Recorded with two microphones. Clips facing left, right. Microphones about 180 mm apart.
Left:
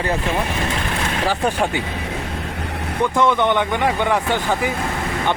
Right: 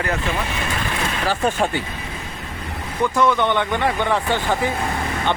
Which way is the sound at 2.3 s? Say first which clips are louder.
Left 5 dB; 75° left (ahead or behind).